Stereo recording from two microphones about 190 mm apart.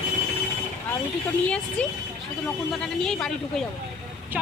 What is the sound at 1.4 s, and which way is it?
Speech, 5° left (ahead or behind).